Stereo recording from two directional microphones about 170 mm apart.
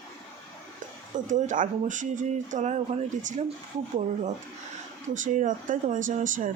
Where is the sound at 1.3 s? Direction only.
45° right (ahead or behind).